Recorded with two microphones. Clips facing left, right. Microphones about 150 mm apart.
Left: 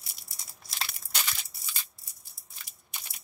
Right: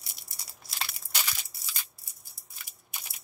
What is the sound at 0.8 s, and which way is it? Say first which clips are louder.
Crushing: even; 5° right (ahead or behind).